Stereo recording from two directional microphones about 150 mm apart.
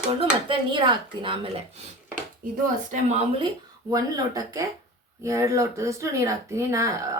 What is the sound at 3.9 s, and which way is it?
Speech, 25° right (ahead or behind).